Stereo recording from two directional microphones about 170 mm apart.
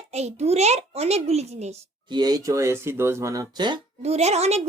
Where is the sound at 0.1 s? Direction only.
40° right (ahead or behind).